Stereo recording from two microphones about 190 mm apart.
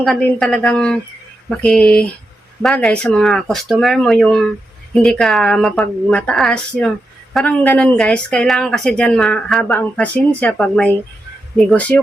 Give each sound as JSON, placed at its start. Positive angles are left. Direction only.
{"t": 0.0, "sound": "speech", "side_deg": 5}